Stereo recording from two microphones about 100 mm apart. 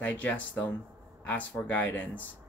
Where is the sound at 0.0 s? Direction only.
15° left (ahead or behind).